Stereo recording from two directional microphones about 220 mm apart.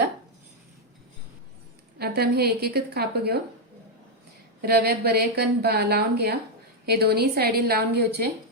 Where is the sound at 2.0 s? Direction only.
45° right (ahead or behind).